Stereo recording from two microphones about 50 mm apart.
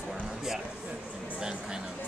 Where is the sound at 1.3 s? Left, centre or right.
Centre.